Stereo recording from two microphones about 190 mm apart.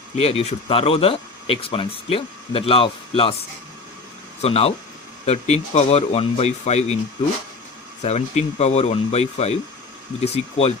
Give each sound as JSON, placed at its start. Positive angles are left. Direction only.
{"t": 0.2, "sound": "speech", "side_deg": 30}
{"t": 4.4, "sound": "speech", "side_deg": 30}
{"t": 8.0, "sound": "speech", "side_deg": 35}